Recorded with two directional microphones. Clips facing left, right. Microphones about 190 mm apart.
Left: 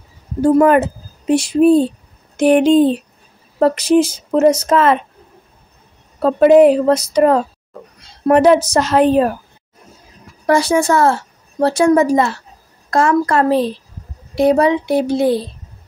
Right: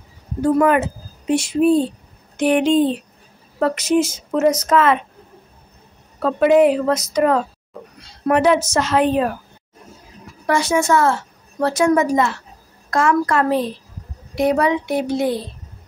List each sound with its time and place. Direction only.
0.4 s speech: 35° left (ahead or behind)
6.1 s speech: 35° left (ahead or behind)
10.4 s a woman's voice: 35° left (ahead or behind)